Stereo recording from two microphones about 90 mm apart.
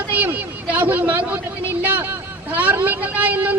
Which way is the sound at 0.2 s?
20° right (ahead or behind).